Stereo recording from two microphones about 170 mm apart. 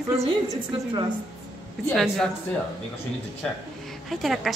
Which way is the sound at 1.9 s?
5° left (ahead or behind).